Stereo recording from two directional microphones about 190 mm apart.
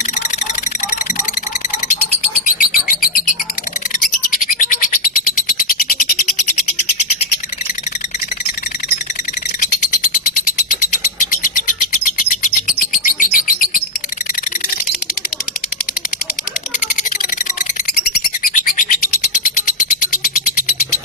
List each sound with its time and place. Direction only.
2.6 s music: 45° left (ahead or behind)
4.3 s a sound: 45° left (ahead or behind)
9.6 s frog: 45° left (ahead or behind)
11.1 s bird: 45° left (ahead or behind)
18.4 s bird: 45° left (ahead or behind)
19.4 s a sound: 45° left (ahead or behind)